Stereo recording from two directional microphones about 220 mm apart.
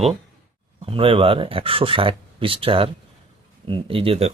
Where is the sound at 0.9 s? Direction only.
25° right (ahead or behind).